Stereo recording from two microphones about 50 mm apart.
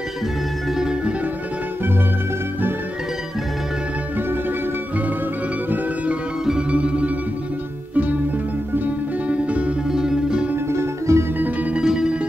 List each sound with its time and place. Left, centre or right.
0.7 s music: centre
6.7 s music: right
9.3 s music: right
9.8 s music: centre
10.7 s music: right
11.3 s music: right
11.7 s music: centre